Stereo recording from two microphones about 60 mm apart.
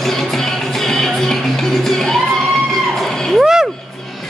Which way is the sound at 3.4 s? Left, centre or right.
Centre.